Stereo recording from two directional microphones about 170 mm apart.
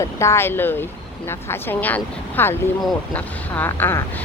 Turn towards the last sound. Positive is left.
turn(degrees=10)  # may be behind; listen again after turning